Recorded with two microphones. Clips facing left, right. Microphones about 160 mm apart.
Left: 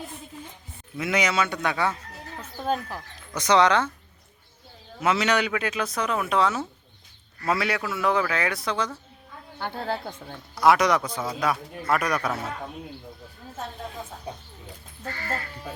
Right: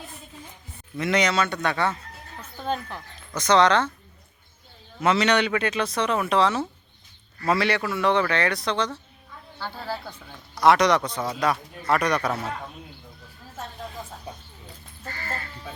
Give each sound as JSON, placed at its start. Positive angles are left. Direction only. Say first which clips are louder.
{"t": 0.9, "sound": "a man's voice", "louder": "right 2 dB", "side_deg": 5}
{"t": 4.9, "sound": "a man's voice", "louder": "right 2 dB", "side_deg": 5}
{"t": 9.6, "sound": "speech", "louder": "left 3 dB", "side_deg": 55}
{"t": 10.5, "sound": "a man's voice", "louder": "right 1 dB", "side_deg": 5}